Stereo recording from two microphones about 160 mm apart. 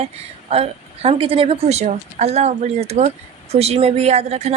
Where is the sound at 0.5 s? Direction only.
35° right (ahead or behind).